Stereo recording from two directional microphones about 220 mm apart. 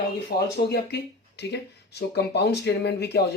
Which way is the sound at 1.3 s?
50° left (ahead or behind).